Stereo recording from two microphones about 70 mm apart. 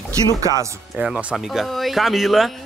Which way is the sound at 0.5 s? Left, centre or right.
Left.